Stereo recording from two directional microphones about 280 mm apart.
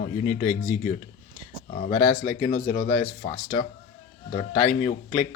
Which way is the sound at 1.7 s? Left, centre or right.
Left.